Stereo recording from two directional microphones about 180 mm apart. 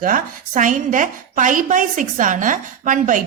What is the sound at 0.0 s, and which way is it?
A woman's voice, 45° right (ahead or behind).